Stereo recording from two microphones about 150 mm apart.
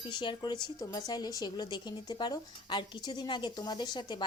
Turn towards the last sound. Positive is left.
turn(degrees=30)  # may be behind; listen again after turning